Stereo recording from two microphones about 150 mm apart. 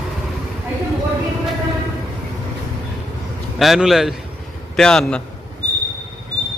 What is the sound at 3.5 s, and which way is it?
Speech, centre (ahead or behind).